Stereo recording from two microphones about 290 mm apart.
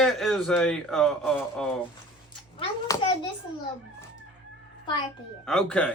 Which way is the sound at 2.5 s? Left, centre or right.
Centre.